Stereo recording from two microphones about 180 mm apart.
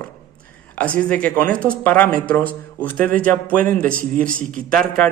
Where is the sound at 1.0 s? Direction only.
5° left (ahead or behind).